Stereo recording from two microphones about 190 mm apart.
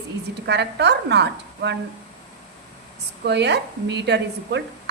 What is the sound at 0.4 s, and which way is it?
A woman's voice, 60° right (ahead or behind).